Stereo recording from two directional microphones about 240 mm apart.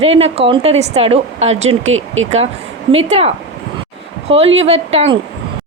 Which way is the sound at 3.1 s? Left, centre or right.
Right.